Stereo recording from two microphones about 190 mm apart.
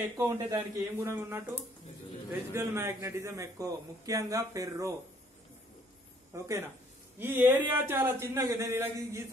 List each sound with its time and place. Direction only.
0.2 s a man's voice: 15° right (ahead or behind)
2.5 s a man's voice: 15° right (ahead or behind)
6.3 s a man's voice: 15° right (ahead or behind)